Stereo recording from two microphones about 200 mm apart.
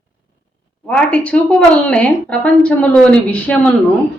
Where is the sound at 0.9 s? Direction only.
5° left (ahead or behind).